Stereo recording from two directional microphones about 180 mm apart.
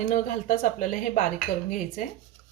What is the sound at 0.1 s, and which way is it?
Speech, 45° left (ahead or behind).